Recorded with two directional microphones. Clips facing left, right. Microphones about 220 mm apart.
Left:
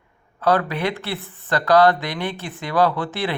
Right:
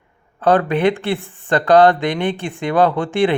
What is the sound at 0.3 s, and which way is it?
Speech, 30° right (ahead or behind).